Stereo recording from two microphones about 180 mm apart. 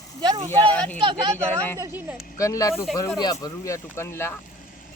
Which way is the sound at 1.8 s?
10° right (ahead or behind).